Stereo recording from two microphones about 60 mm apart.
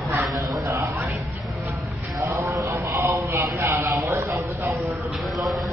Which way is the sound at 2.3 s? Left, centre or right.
Right.